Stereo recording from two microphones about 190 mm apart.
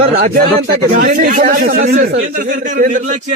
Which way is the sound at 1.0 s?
50° right (ahead or behind).